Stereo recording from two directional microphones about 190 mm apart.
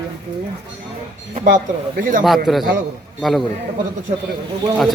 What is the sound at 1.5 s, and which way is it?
Speech, 45° right (ahead or behind).